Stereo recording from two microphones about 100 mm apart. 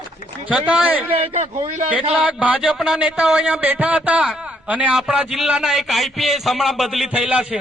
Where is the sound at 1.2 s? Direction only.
90° right.